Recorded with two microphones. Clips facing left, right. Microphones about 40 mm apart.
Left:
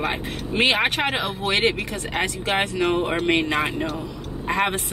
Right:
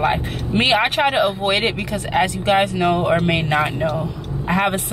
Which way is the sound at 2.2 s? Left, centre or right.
Centre.